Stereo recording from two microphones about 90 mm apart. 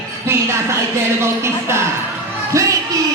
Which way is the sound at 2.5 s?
35° right (ahead or behind).